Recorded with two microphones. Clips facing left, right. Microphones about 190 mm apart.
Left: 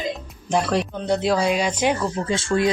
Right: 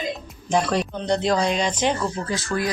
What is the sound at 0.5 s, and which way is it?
Speech, 5° left (ahead or behind).